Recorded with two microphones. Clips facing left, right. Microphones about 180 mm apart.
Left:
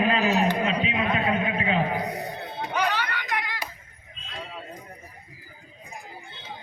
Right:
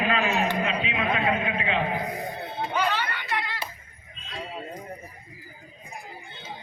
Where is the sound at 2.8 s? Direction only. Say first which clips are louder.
Left 2 dB; 15° left (ahead or behind).